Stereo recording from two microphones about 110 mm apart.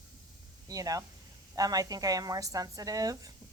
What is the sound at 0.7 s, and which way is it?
A woman's voice, 30° right (ahead or behind).